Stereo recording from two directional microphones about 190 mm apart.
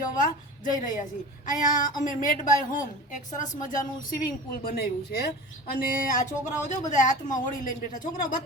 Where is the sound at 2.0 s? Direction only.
40° left (ahead or behind).